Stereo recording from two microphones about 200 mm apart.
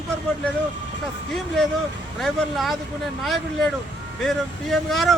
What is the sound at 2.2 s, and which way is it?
Speech, centre (ahead or behind).